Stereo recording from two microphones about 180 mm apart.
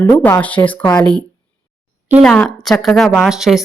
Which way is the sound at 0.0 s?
15° left (ahead or behind).